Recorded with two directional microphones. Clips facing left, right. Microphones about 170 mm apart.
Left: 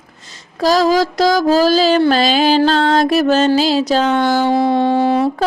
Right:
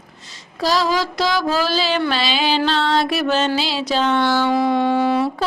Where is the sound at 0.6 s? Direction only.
45° left (ahead or behind).